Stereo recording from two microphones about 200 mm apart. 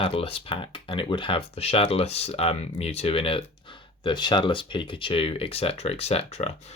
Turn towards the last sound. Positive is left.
turn(degrees=30)  # may be behind; listen again after turning